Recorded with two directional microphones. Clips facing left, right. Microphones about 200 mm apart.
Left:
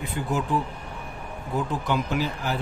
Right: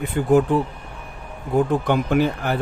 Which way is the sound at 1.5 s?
55° right (ahead or behind).